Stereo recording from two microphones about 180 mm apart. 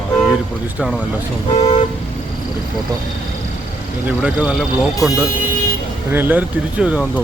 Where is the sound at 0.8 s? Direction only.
5° right (ahead or behind).